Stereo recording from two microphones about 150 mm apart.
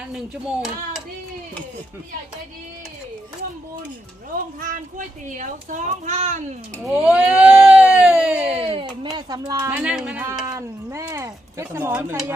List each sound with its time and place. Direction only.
0.1 s speech: centre (ahead or behind)
4.6 s a child's voice: 60° right (ahead or behind)
6.8 s speech: 5° right (ahead or behind)
8.5 s a sound: 40° right (ahead or behind)
9.6 s speech: 5° right (ahead or behind)
10.4 s speech: 20° right (ahead or behind)